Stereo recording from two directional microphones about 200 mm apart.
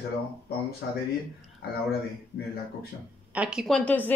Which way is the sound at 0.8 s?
55° left (ahead or behind).